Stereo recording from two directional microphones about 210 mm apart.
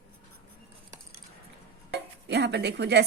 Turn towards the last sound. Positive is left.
turn(degrees=-55)  # may be behind; listen again after turning